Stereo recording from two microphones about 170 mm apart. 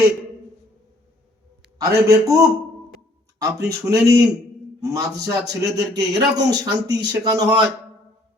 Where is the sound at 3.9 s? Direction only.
15° right (ahead or behind).